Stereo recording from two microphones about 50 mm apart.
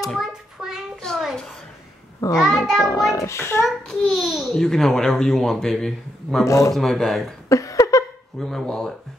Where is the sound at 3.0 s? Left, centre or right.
Left.